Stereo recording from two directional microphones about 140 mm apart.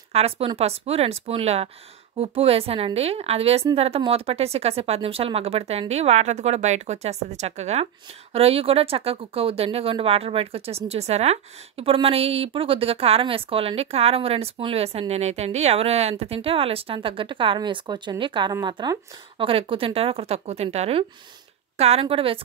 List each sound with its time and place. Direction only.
0.1 s a woman's voice: 45° right (ahead or behind)